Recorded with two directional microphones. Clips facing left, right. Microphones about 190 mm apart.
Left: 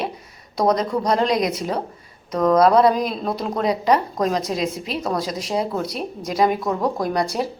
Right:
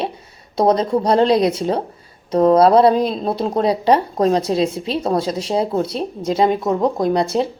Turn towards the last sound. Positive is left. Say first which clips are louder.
# right 5 dB
turn(degrees=-25)  # may be behind; listen again after turning